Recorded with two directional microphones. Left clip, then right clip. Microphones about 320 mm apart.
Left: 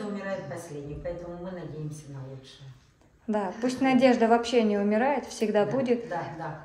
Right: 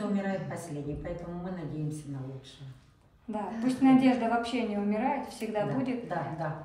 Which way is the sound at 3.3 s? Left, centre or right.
Left.